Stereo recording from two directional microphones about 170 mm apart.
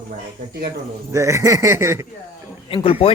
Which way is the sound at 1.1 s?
15° right (ahead or behind).